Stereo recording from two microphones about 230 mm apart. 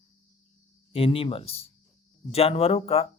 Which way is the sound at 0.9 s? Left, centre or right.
Left.